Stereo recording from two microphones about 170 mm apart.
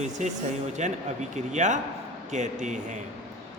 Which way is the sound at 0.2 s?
45° right (ahead or behind).